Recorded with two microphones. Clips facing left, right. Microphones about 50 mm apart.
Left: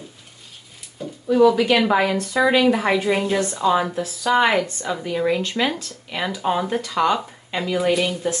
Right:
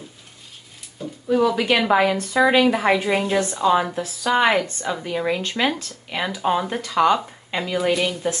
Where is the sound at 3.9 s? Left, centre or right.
Right.